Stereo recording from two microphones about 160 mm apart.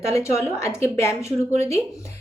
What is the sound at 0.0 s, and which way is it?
Speech, 20° left (ahead or behind).